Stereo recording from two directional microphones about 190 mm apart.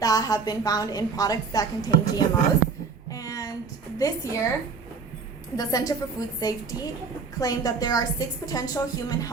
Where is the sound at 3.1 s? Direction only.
20° left (ahead or behind).